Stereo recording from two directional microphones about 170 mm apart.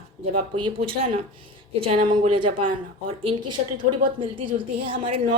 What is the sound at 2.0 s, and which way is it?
Speech, 50° right (ahead or behind).